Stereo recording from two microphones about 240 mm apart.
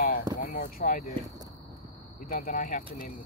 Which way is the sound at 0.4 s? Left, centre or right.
Left.